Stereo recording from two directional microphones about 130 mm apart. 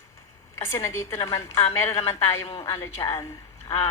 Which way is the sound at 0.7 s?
20° left (ahead or behind).